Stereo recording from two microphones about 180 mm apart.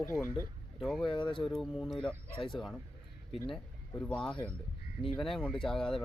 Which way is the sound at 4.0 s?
5° left (ahead or behind).